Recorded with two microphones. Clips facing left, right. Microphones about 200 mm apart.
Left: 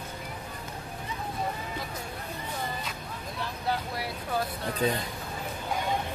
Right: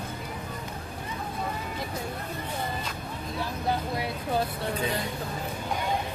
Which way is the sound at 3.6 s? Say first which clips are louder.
Right 2 dB; 20° right (ahead or behind).